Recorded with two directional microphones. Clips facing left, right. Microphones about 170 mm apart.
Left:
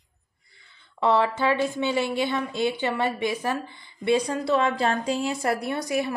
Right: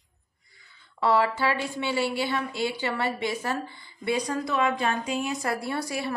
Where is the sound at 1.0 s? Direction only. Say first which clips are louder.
Left 2 dB; 20° left (ahead or behind).